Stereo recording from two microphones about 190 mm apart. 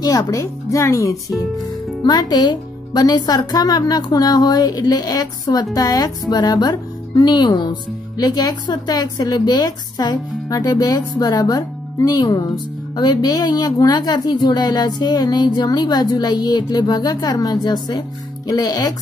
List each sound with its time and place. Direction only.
0.0 s a woman's voice: 20° left (ahead or behind)